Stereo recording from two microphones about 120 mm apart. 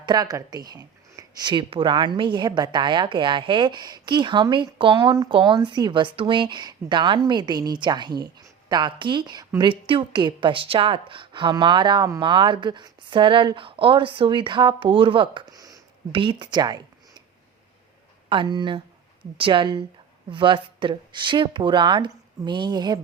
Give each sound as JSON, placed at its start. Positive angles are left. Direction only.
{"t": 0.0, "sound": "a woman's voice", "side_deg": -35}
{"t": 16.1, "sound": "a woman's voice", "side_deg": -45}
{"t": 18.3, "sound": "a woman's voice", "side_deg": -40}